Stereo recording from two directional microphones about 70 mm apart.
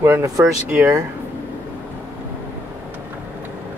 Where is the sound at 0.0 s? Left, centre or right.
Right.